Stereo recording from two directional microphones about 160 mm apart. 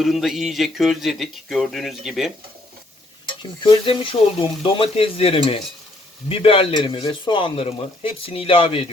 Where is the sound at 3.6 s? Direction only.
35° left (ahead or behind).